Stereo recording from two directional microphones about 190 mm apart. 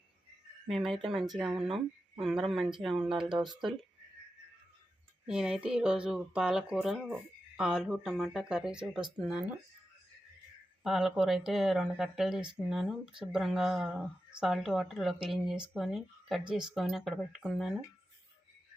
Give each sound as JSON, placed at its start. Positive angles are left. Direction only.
{"t": 0.7, "sound": "speech", "side_deg": 0}
{"t": 3.1, "sound": "speech", "side_deg": -25}
{"t": 5.2, "sound": "speech", "side_deg": -5}
{"t": 10.8, "sound": "speech", "side_deg": 0}